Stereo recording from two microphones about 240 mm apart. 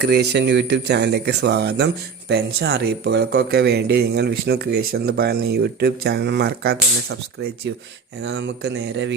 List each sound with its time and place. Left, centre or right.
0.0 s speech: right
8.2 s speech: right